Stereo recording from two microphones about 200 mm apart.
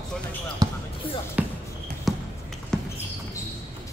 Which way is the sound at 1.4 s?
5° right (ahead or behind).